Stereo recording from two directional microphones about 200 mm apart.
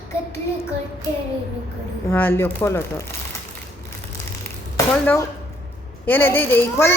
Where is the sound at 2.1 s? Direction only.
10° left (ahead or behind).